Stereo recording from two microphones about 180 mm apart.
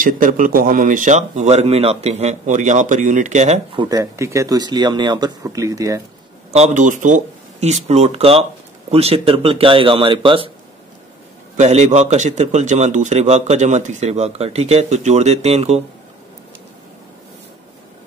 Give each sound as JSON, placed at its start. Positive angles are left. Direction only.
{"t": 0.0, "sound": "a man's voice", "side_deg": -50}
{"t": 3.8, "sound": "speech", "side_deg": -15}
{"t": 6.5, "sound": "a man's voice", "side_deg": -40}
{"t": 11.6, "sound": "a man's voice", "side_deg": -40}